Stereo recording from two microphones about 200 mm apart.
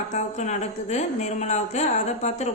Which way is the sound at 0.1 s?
35° left (ahead or behind).